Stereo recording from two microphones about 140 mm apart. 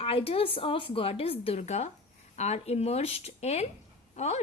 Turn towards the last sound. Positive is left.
turn(degrees=50)  # may be behind; listen again after turning